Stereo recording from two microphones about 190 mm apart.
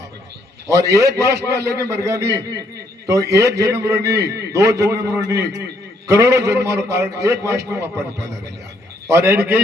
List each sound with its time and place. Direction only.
0.7 s a man's voice: 15° right (ahead or behind)
9.0 s a man's voice: 15° right (ahead or behind)